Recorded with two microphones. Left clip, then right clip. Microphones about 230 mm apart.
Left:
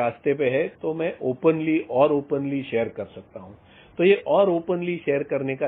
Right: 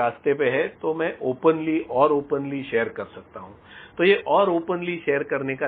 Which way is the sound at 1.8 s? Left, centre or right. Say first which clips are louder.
Even; left.